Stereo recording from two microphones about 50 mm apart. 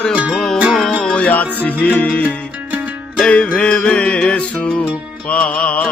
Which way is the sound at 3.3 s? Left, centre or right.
Left.